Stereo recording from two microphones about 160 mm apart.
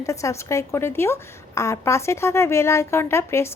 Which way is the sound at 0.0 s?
20° left (ahead or behind).